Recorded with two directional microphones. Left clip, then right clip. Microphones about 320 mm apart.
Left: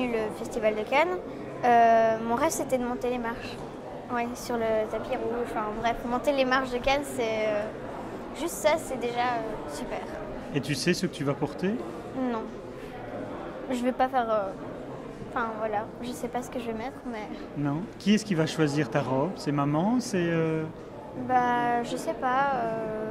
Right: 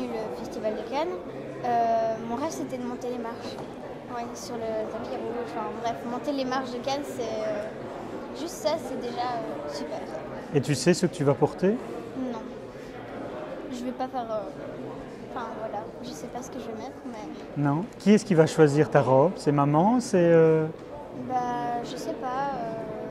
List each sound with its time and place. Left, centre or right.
0.0 s a sound: left
3.0 s a woman's voice: left
5.9 s a woman's voice: left
8.6 s a woman's voice: left
10.5 s speech: right
13.8 s a woman's voice: left
16.3 s a woman's voice: left
17.6 s speech: right
21.3 s a woman's voice: left